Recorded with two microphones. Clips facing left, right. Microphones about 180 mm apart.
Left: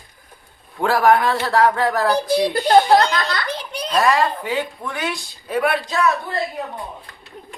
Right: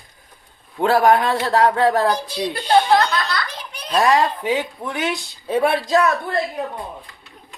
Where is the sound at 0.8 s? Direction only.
25° right (ahead or behind).